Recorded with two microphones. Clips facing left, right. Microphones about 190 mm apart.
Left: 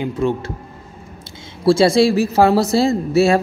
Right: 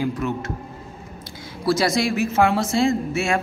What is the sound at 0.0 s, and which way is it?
Speech, 30° left (ahead or behind).